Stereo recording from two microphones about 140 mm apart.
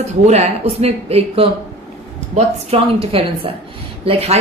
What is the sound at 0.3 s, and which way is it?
A woman's voice, 50° right (ahead or behind).